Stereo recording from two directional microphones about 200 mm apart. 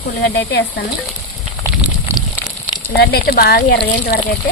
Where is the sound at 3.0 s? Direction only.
50° left (ahead or behind).